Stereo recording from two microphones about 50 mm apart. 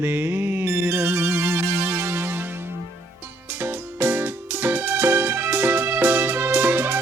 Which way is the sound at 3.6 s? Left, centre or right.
Right.